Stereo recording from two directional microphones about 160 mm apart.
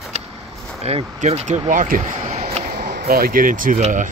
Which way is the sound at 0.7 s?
40° right (ahead or behind).